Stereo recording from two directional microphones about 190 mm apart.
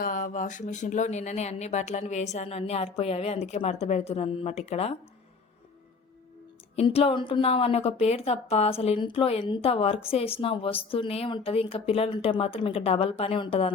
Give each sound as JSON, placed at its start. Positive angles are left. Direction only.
{"t": 0.0, "sound": "a woman's voice", "side_deg": 45}
{"t": 6.7, "sound": "a woman's voice", "side_deg": 30}